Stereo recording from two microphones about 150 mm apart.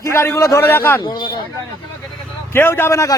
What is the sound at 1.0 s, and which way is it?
Speech, 30° left (ahead or behind).